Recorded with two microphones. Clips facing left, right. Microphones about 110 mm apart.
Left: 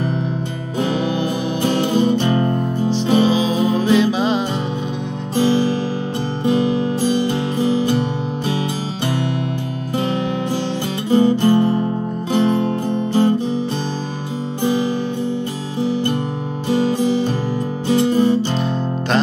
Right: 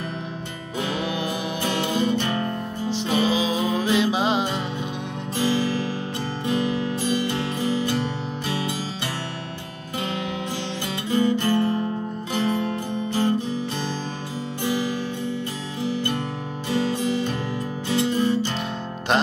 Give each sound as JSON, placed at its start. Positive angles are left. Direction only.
{"t": 0.7, "sound": "music", "side_deg": 30}
{"t": 4.0, "sound": "music", "side_deg": -20}
{"t": 5.3, "sound": "music", "side_deg": 25}
{"t": 11.1, "sound": "music", "side_deg": 30}
{"t": 14.6, "sound": "music", "side_deg": 25}
{"t": 15.8, "sound": "guitar", "side_deg": 30}
{"t": 17.8, "sound": "music", "side_deg": 25}